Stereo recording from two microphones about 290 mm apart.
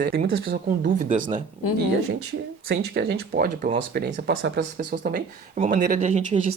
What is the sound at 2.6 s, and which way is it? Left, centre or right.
Speech, right.